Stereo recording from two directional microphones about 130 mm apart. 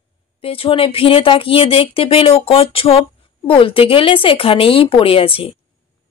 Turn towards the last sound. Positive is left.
turn(degrees=45)  # may be behind; listen again after turning